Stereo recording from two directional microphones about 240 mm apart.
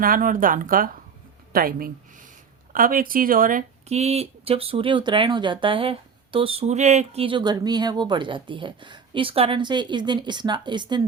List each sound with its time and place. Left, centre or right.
0.0 s speech: right; by 11.0 s centre